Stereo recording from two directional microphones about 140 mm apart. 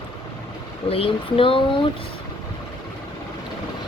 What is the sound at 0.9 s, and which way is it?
Speech, 45° left (ahead or behind).